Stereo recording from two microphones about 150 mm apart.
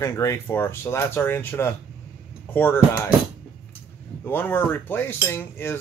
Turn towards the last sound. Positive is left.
turn(degrees=15)  # may be behind; listen again after turning